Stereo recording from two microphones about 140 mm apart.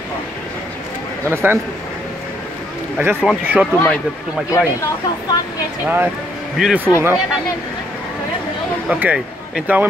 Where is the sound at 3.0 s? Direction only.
15° right (ahead or behind).